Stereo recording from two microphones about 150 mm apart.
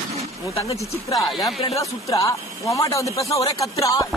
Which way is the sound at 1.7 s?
20° left (ahead or behind).